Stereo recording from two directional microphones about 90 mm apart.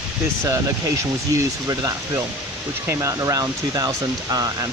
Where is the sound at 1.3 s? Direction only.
40° right (ahead or behind).